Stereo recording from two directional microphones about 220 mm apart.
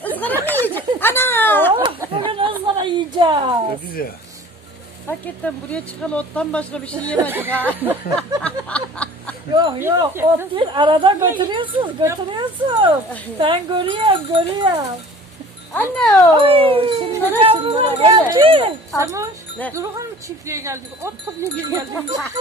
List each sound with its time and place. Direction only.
0.0 s a sound: 10° left (ahead or behind)
1.7 s a sound: 25° right (ahead or behind)
4.0 s speech: 40° left (ahead or behind)
5.7 s speech: 5° left (ahead or behind)
7.2 s speech: 10° right (ahead or behind)
8.4 s a sound: 5° left (ahead or behind)
9.6 s speech: 15° right (ahead or behind)
15.7 s speech: 10° left (ahead or behind)
16.4 s speech: 25° right (ahead or behind)